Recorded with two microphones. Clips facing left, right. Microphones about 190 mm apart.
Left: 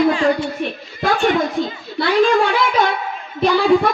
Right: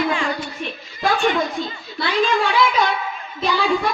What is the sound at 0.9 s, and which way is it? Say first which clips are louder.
A child's voice: left 2 dB; 55° left (ahead or behind).